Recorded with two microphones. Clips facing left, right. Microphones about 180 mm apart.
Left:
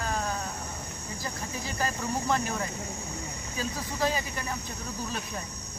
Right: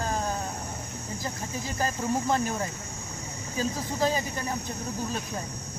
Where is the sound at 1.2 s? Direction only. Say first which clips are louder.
Right 1 dB; 45° right (ahead or behind).